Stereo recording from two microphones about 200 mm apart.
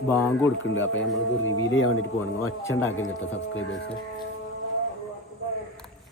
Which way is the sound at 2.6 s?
15° left (ahead or behind).